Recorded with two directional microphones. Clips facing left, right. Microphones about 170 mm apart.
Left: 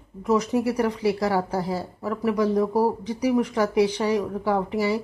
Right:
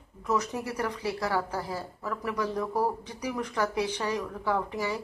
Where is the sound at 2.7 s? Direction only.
35° left (ahead or behind).